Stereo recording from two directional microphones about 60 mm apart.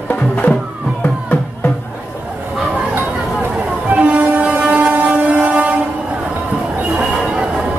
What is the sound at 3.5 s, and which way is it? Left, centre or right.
Train, right.